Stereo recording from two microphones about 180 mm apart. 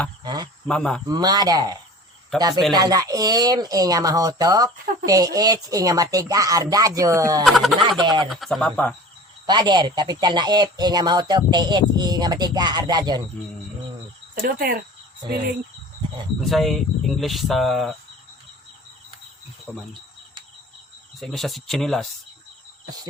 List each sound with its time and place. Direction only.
0.2 s speech: 20° right (ahead or behind)
0.7 s speech: 5° left (ahead or behind)
1.0 s speech: 20° right (ahead or behind)
2.3 s speech: centre (ahead or behind)
2.7 s speech: 20° right (ahead or behind)
7.4 s speech: centre (ahead or behind)
7.8 s speech: 25° right (ahead or behind)
8.3 s speech: centre (ahead or behind)
9.5 s speech: 25° right (ahead or behind)
14.3 s cricket: 55° right (ahead or behind)
16.5 s speech: centre (ahead or behind)
19.7 s cricket: 10° left (ahead or behind)
21.2 s speech: centre (ahead or behind)